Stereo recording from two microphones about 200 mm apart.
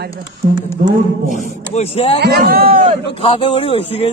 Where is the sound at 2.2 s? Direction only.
55° right (ahead or behind).